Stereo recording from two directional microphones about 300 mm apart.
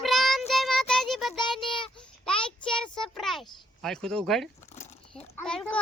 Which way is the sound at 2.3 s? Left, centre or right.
Centre.